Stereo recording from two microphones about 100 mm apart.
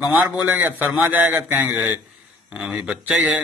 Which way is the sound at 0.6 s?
20° right (ahead or behind).